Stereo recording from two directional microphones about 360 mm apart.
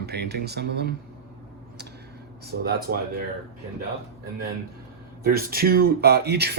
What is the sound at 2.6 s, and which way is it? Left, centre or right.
Speech, right.